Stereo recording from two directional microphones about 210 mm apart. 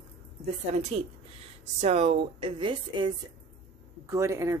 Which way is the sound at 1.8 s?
30° right (ahead or behind).